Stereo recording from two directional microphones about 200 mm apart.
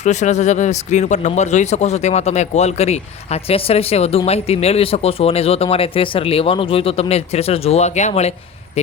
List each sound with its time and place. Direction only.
0.0 s speech: 35° left (ahead or behind)